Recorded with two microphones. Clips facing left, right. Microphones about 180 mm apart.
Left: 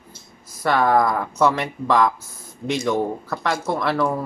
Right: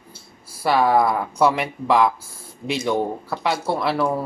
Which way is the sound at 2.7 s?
30° right (ahead or behind).